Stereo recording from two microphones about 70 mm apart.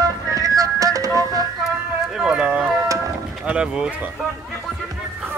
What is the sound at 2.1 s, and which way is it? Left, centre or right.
Speech, centre.